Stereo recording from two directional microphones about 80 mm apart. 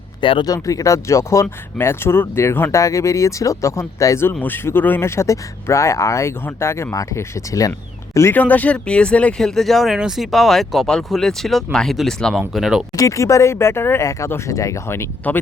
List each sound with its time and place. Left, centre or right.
0.2 s speech: left
0.4 s speech: left
2.7 s speech: left
4.4 s speech: left
8.3 s speech: left
9.6 s speech: centre
13.0 s speech: left
14.0 s speech: left
15.3 s speech: left